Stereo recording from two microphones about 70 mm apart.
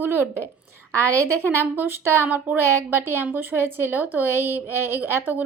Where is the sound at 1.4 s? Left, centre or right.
Right.